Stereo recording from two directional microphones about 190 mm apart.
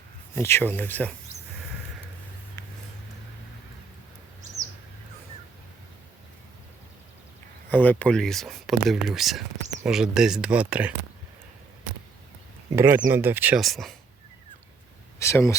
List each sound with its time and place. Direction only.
0.3 s speech: 10° left (ahead or behind)
7.7 s speech: 10° left (ahead or behind); by 10.9 s 5° right (ahead or behind)
12.7 s speech: 10° right (ahead or behind)
15.2 s speech: 15° left (ahead or behind)